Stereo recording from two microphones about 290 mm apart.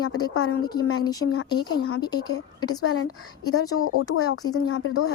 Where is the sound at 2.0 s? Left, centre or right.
Centre.